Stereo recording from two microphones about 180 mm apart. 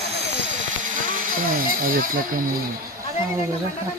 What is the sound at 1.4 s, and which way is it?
Speech, 50° right (ahead or behind).